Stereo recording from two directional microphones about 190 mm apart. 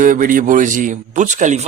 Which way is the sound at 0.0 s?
45° right (ahead or behind).